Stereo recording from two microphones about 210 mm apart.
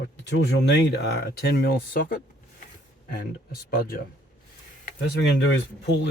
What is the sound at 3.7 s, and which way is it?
Speech, 45° left (ahead or behind).